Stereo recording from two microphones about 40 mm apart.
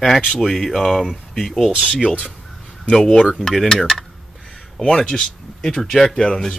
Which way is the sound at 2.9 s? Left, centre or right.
Centre.